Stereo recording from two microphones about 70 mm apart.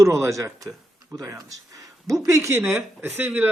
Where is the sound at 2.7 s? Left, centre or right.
Right.